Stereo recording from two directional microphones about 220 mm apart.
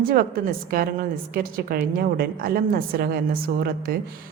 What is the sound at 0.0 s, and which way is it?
Speech, 40° right (ahead or behind).